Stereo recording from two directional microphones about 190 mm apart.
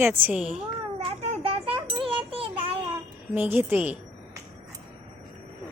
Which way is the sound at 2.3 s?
30° right (ahead or behind).